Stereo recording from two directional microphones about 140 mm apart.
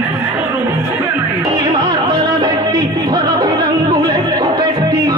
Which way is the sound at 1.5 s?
35° right (ahead or behind).